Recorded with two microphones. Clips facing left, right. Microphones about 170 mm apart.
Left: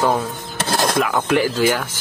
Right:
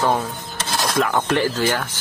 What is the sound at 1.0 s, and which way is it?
Speech, 10° left (ahead or behind).